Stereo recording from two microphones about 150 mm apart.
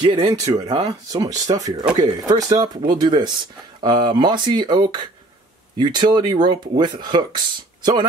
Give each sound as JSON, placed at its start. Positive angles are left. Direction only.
{"t": 0.0, "sound": "speech", "side_deg": -30}